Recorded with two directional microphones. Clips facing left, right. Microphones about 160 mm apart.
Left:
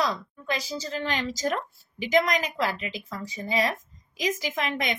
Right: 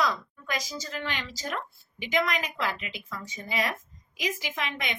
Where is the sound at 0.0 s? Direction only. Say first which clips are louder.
Left 1 dB; 30° left (ahead or behind).